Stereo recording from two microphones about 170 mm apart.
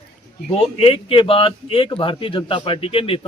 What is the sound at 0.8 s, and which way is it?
A man's voice, 30° left (ahead or behind).